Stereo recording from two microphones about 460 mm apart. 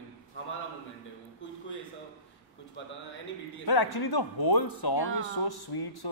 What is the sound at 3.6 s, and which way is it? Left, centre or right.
Speech, left.